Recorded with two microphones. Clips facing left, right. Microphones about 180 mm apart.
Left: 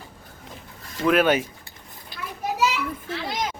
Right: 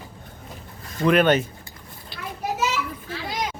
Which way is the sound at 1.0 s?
5° left (ahead or behind).